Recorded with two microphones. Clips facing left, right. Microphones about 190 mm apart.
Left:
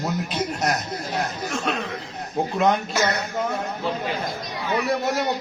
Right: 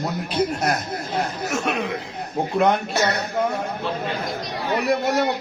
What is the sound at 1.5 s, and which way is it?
Speech, 10° right (ahead or behind).